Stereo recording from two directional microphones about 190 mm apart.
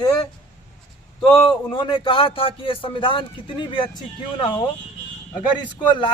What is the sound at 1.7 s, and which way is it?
A man's voice, 25° left (ahead or behind).